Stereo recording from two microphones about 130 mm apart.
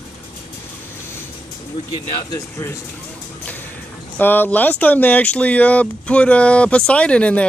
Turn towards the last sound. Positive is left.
turn(degrees=10)  # may be behind; listen again after turning